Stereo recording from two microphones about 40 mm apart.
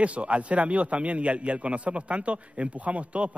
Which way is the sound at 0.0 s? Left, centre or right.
Right.